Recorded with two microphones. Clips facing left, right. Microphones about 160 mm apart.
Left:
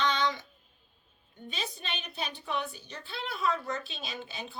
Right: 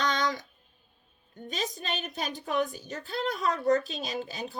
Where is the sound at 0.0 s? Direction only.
40° right (ahead or behind).